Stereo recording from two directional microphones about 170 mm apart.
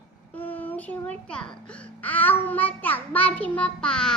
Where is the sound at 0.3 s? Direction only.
10° left (ahead or behind).